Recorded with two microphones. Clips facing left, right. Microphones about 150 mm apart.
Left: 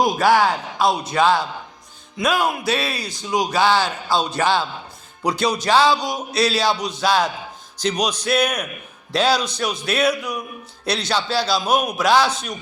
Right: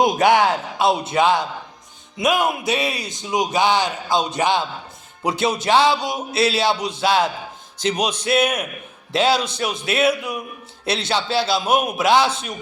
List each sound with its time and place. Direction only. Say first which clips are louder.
0.0 s speech: right 1 dB; 20° right (ahead or behind)